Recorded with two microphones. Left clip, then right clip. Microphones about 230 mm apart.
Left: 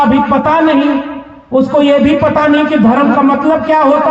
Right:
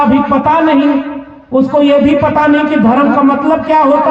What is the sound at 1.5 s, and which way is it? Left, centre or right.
A man's voice, left.